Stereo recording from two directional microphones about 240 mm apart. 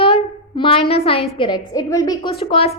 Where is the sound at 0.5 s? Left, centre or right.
Left.